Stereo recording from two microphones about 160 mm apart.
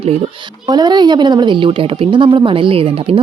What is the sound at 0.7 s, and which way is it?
Speech, 25° right (ahead or behind).